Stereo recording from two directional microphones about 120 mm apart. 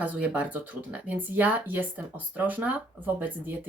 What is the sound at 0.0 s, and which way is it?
Speech, 10° right (ahead or behind).